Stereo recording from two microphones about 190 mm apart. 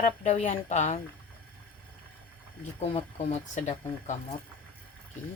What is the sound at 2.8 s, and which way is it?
A woman's voice, 30° left (ahead or behind).